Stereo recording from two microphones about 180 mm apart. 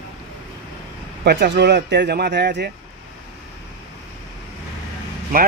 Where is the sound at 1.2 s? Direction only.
70° right (ahead or behind).